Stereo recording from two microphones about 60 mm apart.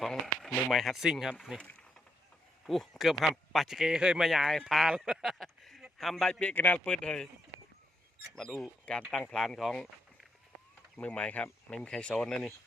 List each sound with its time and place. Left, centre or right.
0.0 s a sound: centre
0.7 s speech: centre
2.6 s speech: centre
4.2 s speech: centre
6.4 s speech: left
8.4 s speech: centre
10.9 s speech: centre
12.3 s speech: centre